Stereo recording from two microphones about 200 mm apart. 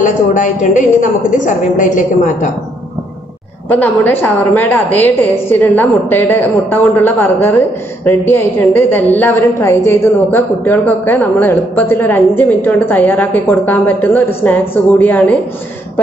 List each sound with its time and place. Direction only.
0.0 s a woman's voice: 40° left (ahead or behind)
3.6 s a woman's voice: 10° left (ahead or behind)